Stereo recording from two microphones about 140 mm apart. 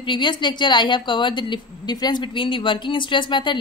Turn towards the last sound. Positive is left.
turn(degrees=35)  # may be behind; listen again after turning